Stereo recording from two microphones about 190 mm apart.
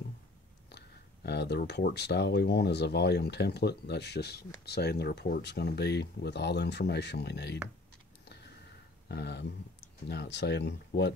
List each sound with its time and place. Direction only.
0.7 s speech: 60° left (ahead or behind)
9.1 s speech: 65° left (ahead or behind)